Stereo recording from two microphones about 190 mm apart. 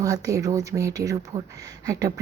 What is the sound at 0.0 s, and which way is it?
Speech, 15° right (ahead or behind).